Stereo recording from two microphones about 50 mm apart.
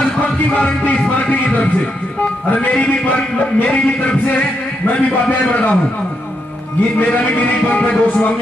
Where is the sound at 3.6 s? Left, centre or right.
Left.